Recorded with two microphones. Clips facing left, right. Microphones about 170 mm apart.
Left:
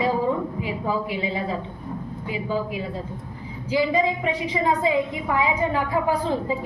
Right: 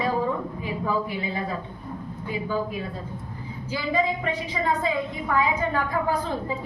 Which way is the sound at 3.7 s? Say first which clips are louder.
Left 4 dB; 15° left (ahead or behind).